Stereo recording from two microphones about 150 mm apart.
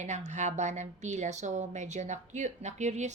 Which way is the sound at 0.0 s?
50° right (ahead or behind).